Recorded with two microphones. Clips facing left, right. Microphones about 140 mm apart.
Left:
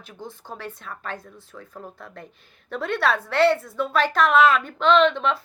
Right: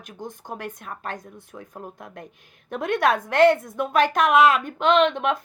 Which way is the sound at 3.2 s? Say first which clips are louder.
Right 3 dB; 50° right (ahead or behind).